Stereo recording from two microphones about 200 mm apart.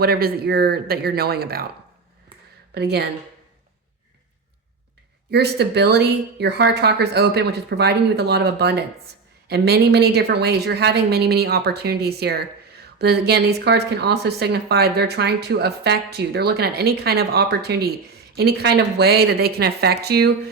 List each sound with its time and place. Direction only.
0.0 s a woman's voice: 50° right (ahead or behind)
2.7 s a woman's voice: 55° right (ahead or behind)
5.3 s a woman's voice: 55° right (ahead or behind)